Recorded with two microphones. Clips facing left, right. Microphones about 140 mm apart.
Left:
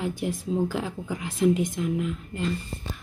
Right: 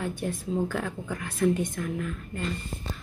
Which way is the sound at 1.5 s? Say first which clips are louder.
Left 3 dB; 90° left.